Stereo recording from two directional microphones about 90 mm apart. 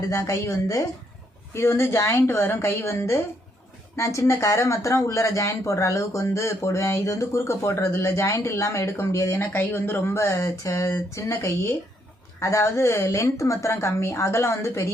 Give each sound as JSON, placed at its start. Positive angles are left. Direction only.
{"t": 0.1, "sound": "a woman's voice", "side_deg": 40}